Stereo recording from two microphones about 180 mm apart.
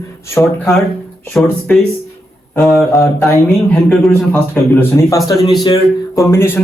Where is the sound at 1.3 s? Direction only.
5° left (ahead or behind).